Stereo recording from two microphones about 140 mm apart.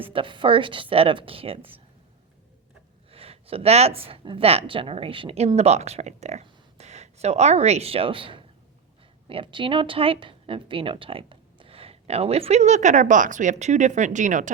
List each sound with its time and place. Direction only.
0.0 s a woman's voice: 40° right (ahead or behind)
3.1 s speech: 45° right (ahead or behind); by 14.5 s 65° right (ahead or behind)